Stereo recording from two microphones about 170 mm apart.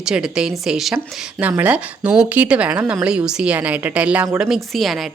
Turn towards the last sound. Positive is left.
turn(degrees=0)  # may be behind; listen again after turning